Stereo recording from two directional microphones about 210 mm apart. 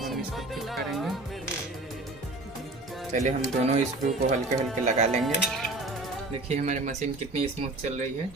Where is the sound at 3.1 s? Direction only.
35° right (ahead or behind).